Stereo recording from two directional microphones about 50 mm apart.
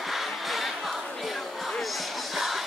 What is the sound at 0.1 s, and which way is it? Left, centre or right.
Music, centre.